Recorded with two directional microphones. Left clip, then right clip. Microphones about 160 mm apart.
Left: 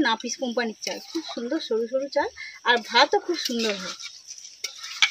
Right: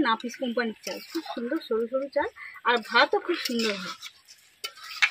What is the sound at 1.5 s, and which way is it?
Speech, 15° left (ahead or behind).